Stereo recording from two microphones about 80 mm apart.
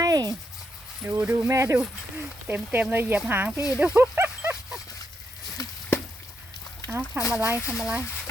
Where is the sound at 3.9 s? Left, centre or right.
Right.